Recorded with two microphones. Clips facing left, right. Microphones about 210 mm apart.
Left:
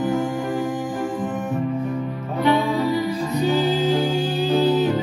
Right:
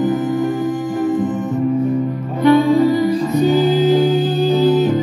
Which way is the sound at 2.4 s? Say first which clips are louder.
Right 8 dB; 50° right (ahead or behind).